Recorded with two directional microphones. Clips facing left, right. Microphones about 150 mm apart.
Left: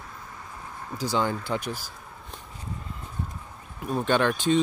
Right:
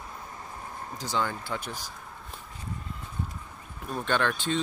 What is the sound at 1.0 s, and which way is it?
Speech, 10° left (ahead or behind).